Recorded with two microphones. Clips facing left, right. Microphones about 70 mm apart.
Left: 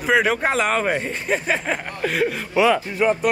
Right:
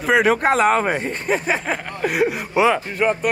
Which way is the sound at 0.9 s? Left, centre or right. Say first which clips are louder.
Right 1 dB; centre.